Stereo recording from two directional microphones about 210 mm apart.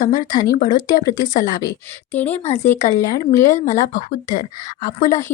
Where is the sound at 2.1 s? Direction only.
10° left (ahead or behind).